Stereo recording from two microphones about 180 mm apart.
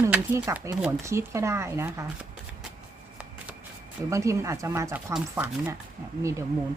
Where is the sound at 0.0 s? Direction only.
15° right (ahead or behind).